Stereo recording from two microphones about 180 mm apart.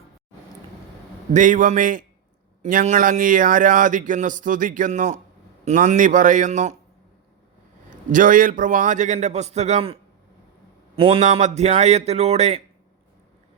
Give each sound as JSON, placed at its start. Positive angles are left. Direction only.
{"t": 1.3, "sound": "speech", "side_deg": -45}
{"t": 7.9, "sound": "a man's voice", "side_deg": -45}